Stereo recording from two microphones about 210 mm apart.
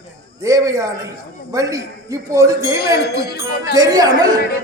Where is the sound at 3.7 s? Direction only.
15° right (ahead or behind).